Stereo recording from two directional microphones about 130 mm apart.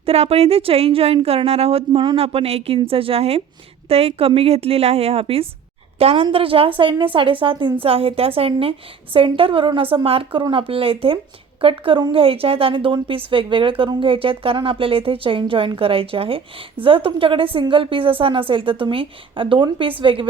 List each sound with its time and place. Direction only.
0.0 s a woman's voice: 50° right (ahead or behind)